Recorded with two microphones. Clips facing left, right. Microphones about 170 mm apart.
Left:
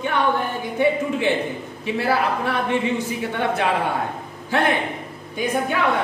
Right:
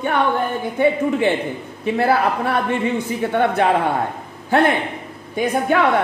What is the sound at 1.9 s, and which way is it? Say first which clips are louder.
Music: right 4 dB; 50° right (ahead or behind).